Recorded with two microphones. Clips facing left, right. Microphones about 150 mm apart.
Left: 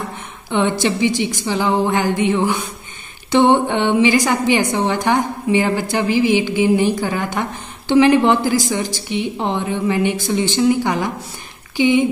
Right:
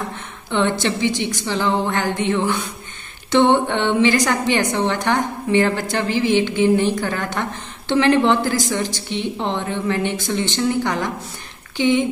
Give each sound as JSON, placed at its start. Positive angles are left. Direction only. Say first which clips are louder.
{"t": 0.5, "sound": "a woman's voice", "louder": "left 2 dB", "side_deg": 10}